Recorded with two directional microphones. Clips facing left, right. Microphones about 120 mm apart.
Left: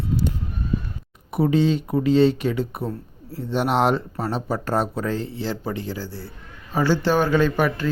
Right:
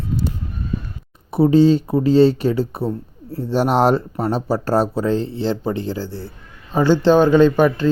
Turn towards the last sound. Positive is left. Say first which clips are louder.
# right 7 dB
turn(degrees=-25)  # may be behind; listen again after turning